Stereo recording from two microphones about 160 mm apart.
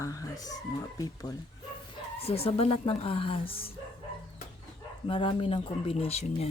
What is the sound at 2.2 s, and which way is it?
Speech, 35° left (ahead or behind).